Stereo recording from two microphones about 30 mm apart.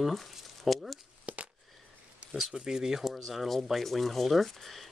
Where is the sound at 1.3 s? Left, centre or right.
Right.